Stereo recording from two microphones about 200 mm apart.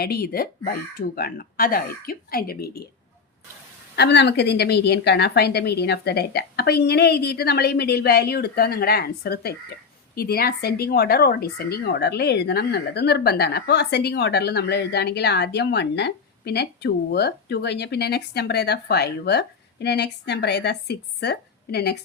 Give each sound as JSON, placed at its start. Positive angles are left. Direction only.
{"t": 0.0, "sound": "a woman's voice", "side_deg": 50}
{"t": 3.9, "sound": "a woman's voice", "side_deg": 55}